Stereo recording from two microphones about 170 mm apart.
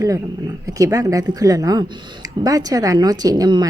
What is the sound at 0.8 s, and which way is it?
A woman's voice, 20° right (ahead or behind).